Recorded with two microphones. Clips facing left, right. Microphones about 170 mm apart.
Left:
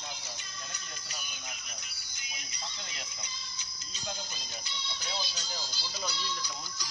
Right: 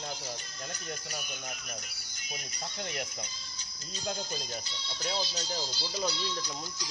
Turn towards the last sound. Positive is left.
turn(degrees=-25)  # may be behind; listen again after turning